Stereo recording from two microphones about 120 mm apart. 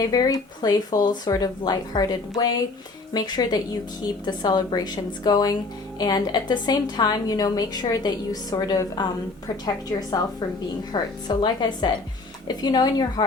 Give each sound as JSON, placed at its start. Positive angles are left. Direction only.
{"t": 0.0, "sound": "a woman's voice", "side_deg": 30}
{"t": 10.9, "sound": "a woman's voice", "side_deg": 40}